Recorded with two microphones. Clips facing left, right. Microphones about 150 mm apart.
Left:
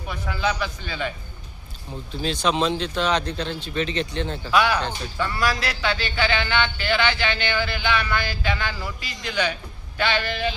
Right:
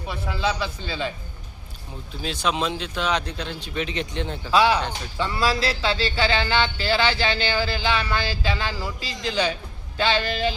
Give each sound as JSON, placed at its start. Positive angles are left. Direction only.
{"t": 0.1, "sound": "a man's voice", "side_deg": -25}
{"t": 2.2, "sound": "a man's voice", "side_deg": -5}
{"t": 4.5, "sound": "a man's voice", "side_deg": -30}